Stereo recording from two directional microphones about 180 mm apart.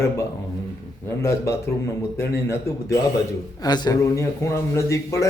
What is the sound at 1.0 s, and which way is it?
A man's voice, 15° left (ahead or behind).